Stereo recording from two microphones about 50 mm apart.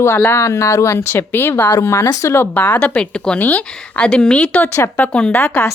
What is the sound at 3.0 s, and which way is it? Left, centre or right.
Speech, centre.